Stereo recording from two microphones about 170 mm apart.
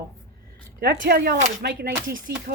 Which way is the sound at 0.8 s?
65° right (ahead or behind).